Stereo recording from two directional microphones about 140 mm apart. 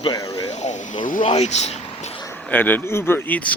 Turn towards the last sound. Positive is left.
turn(degrees=10)  # may be behind; listen again after turning